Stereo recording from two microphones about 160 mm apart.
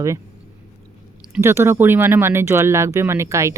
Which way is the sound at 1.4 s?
15° right (ahead or behind).